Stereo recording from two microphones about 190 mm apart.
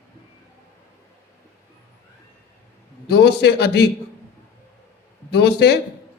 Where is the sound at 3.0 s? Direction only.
60° left (ahead or behind).